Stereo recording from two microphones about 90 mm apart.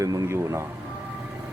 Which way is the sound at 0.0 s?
35° right (ahead or behind).